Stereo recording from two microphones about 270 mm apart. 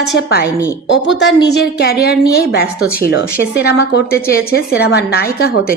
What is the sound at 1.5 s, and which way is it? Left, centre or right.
A woman's voice, left.